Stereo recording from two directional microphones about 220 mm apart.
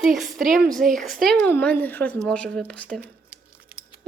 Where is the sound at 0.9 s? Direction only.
Centre (ahead or behind).